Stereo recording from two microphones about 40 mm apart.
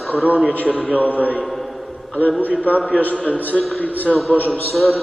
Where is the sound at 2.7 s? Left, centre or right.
Left.